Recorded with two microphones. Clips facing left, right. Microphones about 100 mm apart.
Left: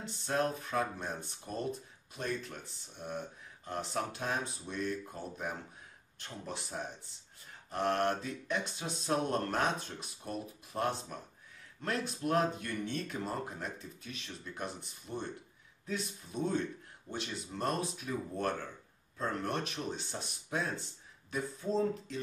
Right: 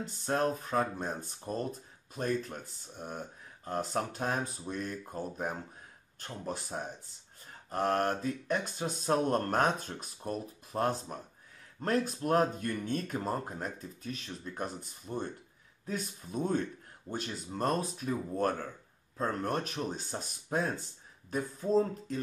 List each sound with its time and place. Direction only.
0.0 s speech: 45° right (ahead or behind)